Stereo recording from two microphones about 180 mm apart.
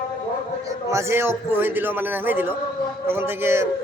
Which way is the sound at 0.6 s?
15° right (ahead or behind).